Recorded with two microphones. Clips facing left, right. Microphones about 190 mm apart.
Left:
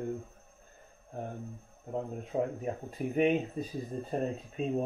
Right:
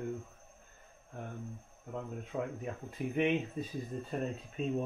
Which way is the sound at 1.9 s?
30° left (ahead or behind).